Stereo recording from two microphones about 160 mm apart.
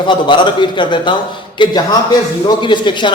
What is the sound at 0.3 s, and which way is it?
A man's voice, 30° left (ahead or behind).